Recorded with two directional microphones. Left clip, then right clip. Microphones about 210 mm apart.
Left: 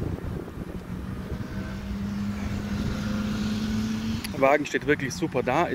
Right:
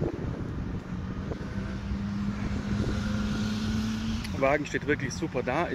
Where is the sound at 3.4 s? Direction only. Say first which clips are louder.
Left 2 dB; 25° left (ahead or behind).